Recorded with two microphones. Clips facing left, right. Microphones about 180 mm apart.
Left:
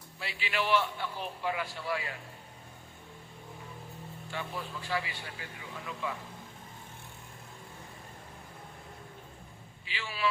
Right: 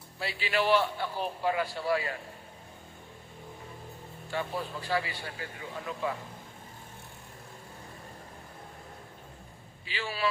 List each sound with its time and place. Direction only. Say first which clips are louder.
0.2 s a man's voice: right 4 dB; 35° right (ahead or behind)
4.3 s a man's voice: right 5 dB; 40° right (ahead or behind)
9.8 s a man's voice: right 5 dB; 35° right (ahead or behind)